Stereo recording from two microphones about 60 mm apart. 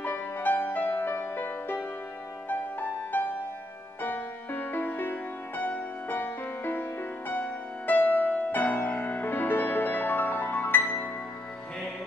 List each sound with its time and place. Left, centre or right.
0.0 s music: left